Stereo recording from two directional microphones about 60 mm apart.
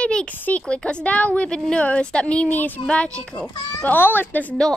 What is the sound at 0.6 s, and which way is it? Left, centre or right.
Speech, centre.